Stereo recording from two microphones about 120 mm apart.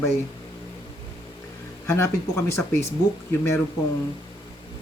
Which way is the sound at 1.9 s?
20° left (ahead or behind).